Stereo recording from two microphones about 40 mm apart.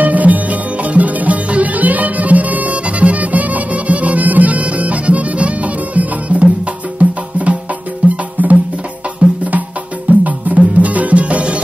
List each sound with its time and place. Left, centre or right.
0.0 s music: right
8.4 s music: right
10.1 s music: right